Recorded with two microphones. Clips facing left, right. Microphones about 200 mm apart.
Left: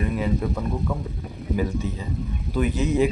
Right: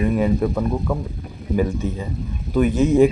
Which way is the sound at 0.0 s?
50° right (ahead or behind).